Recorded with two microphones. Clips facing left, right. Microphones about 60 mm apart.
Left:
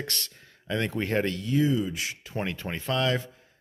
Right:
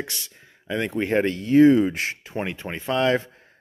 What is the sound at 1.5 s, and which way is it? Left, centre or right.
Speech, right.